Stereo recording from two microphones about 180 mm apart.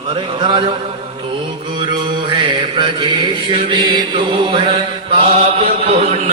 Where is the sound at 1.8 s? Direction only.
25° right (ahead or behind).